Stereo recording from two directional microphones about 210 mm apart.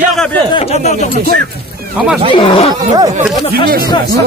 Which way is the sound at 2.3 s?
25° left (ahead or behind).